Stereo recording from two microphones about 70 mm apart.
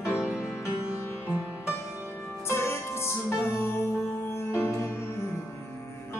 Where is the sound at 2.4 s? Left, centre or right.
Left.